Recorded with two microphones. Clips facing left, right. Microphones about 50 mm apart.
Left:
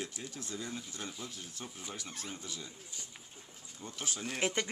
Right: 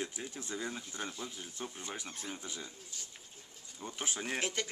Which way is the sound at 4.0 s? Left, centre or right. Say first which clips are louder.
Right 2 dB; right.